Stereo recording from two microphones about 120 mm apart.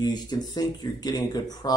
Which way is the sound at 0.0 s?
35° left (ahead or behind).